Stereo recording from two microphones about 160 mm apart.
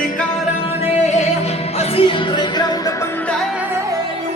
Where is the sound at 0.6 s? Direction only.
40° left (ahead or behind); by 3.4 s 5° left (ahead or behind).